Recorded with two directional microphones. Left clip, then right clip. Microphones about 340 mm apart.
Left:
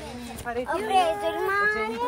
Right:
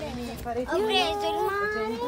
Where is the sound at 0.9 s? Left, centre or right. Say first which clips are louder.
Left 5 dB; centre.